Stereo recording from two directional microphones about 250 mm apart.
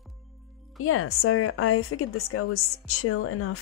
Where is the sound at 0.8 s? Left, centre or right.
Left.